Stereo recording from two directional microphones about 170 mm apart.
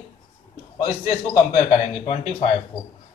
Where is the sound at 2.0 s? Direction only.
40° left (ahead or behind).